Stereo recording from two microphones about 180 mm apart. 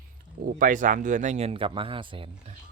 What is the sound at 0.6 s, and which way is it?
Speech, 45° right (ahead or behind).